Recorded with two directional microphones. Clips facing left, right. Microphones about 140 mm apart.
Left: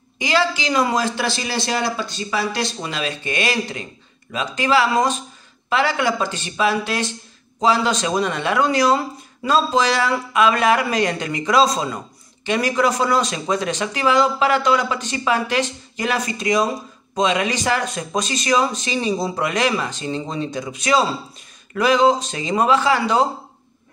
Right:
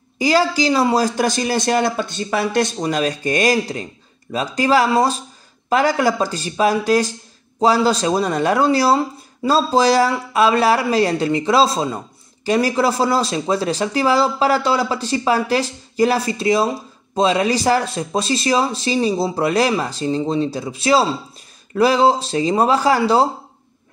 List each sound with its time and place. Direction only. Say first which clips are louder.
0.2 s speech: right 4 dB; 40° right (ahead or behind)